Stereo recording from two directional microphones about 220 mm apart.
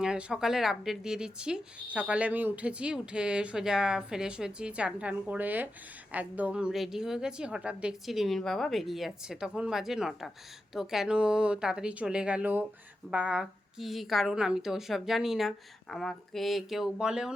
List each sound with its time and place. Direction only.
0.0 s speech: 5° right (ahead or behind)